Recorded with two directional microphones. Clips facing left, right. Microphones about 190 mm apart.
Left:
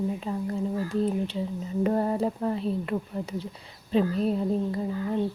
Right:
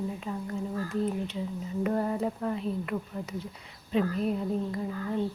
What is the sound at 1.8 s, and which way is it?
Speech, 30° left (ahead or behind).